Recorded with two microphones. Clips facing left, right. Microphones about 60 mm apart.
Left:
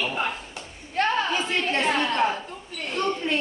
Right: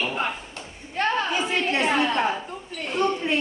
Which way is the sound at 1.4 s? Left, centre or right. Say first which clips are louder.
Right 1 dB; centre.